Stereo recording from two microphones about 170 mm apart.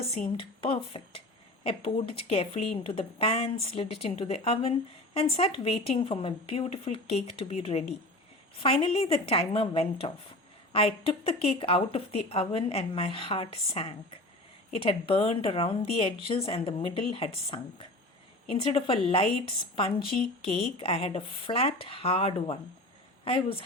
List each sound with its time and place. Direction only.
0.1 s a woman's voice: 35° left (ahead or behind)